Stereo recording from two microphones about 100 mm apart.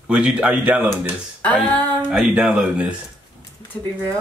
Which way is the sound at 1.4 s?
15° left (ahead or behind).